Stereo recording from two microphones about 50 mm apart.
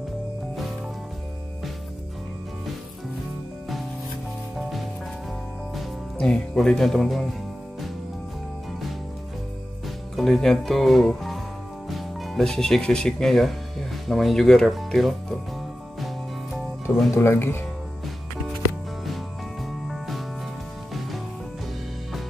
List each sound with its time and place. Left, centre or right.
4.6 s music: centre
6.1 s speech: centre
10.1 s speech: centre
16.9 s speech: left
19.9 s music: centre